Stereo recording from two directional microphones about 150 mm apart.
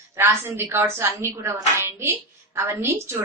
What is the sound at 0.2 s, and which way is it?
A woman's voice, 15° right (ahead or behind).